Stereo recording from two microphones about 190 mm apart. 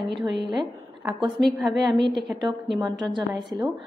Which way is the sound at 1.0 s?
Centre (ahead or behind).